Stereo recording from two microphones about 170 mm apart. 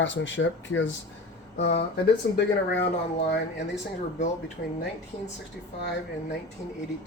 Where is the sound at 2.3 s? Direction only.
65° left (ahead or behind).